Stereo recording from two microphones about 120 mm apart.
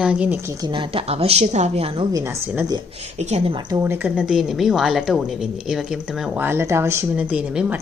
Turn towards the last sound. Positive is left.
turn(degrees=-10)  # may be behind; listen again after turning